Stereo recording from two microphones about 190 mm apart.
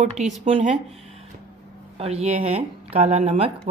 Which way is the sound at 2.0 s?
30° right (ahead or behind).